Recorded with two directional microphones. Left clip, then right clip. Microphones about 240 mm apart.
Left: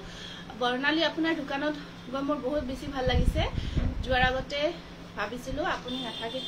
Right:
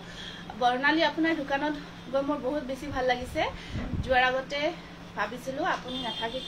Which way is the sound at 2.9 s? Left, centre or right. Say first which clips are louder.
Right 2 dB; centre.